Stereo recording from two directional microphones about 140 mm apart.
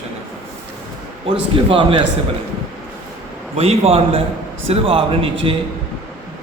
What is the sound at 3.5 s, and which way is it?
A man's voice, 45° right (ahead or behind).